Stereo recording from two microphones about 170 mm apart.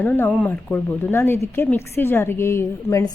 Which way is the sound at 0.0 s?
10° left (ahead or behind).